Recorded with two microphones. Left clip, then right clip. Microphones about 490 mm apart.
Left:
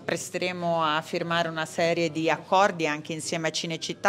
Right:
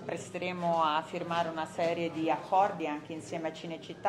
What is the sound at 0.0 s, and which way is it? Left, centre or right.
A woman's voice, left.